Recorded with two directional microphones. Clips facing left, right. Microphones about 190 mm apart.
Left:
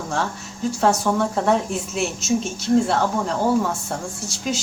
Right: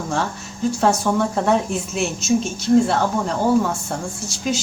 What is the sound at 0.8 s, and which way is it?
Speech, centre (ahead or behind).